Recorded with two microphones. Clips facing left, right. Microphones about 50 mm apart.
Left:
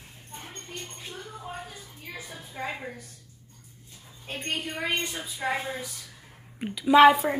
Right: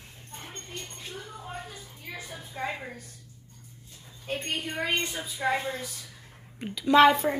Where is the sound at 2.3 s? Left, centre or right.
Centre.